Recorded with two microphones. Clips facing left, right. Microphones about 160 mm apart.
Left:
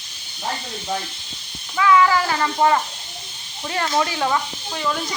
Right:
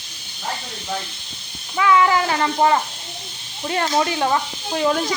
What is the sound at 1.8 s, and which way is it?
Speech, 25° right (ahead or behind).